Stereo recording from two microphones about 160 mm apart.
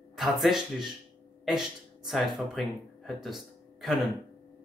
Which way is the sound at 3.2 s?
Centre (ahead or behind).